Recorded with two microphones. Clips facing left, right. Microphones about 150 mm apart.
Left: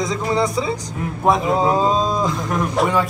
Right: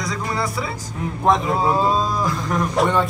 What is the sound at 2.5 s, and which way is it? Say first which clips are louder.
Speech: right 2 dB; centre (ahead or behind).